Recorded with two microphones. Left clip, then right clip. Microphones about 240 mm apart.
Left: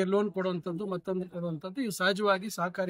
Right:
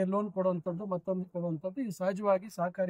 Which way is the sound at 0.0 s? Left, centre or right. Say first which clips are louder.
Left 2 dB; centre.